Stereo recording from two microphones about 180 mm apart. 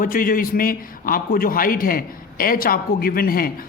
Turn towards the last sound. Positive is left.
turn(degrees=55)  # may be behind; listen again after turning